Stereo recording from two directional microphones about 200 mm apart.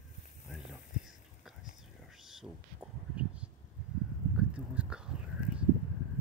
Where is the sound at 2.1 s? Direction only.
Centre (ahead or behind).